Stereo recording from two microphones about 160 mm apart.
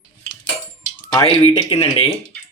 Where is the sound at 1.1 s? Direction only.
30° left (ahead or behind).